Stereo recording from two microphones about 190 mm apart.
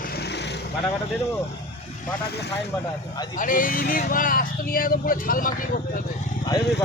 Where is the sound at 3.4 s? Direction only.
45° left (ahead or behind).